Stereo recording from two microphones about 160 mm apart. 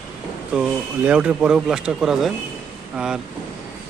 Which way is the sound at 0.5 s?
5° right (ahead or behind).